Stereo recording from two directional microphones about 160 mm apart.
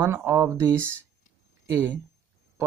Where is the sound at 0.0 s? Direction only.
15° right (ahead or behind).